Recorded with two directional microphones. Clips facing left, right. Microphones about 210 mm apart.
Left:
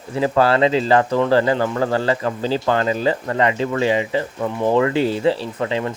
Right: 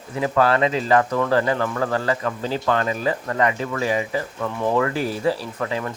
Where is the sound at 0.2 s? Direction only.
30° left (ahead or behind).